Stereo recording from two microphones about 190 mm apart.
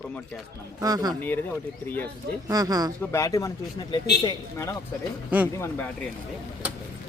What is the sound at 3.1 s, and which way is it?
Speech, 15° left (ahead or behind).